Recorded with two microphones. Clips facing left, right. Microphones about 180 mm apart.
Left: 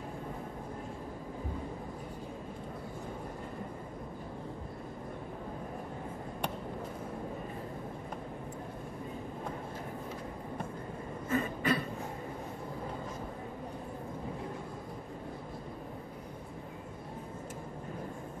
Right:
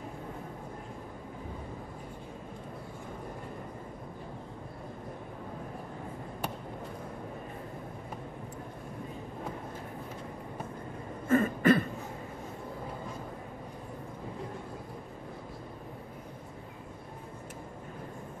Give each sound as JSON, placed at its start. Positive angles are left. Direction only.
{"t": 11.2, "sound": "cough", "side_deg": -50}